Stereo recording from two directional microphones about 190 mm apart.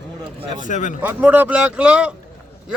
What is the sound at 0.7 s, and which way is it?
Speech, 40° left (ahead or behind).